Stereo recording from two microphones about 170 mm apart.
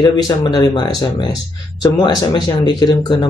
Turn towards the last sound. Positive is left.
turn(degrees=25)  # may be behind; listen again after turning